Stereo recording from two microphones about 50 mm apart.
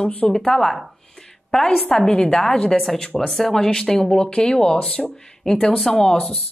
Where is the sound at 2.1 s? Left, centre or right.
Left.